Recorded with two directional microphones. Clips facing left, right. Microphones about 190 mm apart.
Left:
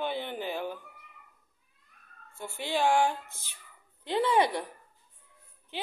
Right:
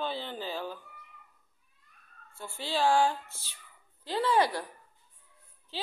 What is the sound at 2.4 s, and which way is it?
A woman's voice, 15° left (ahead or behind).